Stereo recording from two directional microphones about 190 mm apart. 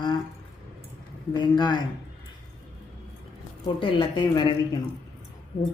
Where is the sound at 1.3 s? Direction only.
25° left (ahead or behind).